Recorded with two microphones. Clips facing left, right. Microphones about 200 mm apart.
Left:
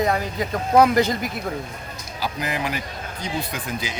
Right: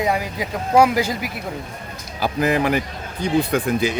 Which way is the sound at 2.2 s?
55° right (ahead or behind).